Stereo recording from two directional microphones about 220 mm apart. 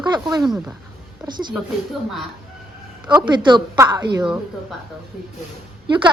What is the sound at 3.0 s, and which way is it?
Speech, 20° right (ahead or behind).